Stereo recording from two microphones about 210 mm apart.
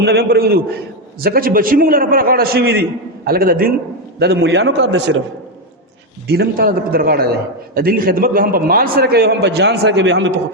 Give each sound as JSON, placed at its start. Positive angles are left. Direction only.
{"t": 0.0, "sound": "a man's voice", "side_deg": -50}
{"t": 6.2, "sound": "a man's voice", "side_deg": -50}